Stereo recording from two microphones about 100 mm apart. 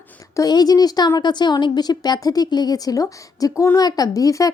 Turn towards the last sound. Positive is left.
turn(degrees=35)  # may be behind; listen again after turning